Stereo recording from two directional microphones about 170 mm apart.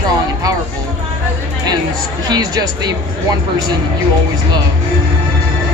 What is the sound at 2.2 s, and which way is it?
Speech, 25° right (ahead or behind).